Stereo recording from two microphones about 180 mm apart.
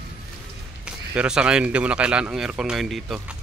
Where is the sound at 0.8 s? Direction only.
5° right (ahead or behind).